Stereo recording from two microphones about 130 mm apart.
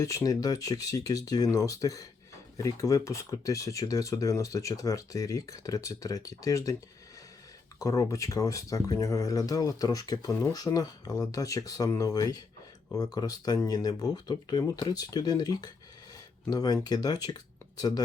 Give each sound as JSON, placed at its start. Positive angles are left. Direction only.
{"t": 0.0, "sound": "speech", "side_deg": 25}
{"t": 7.8, "sound": "speech", "side_deg": 25}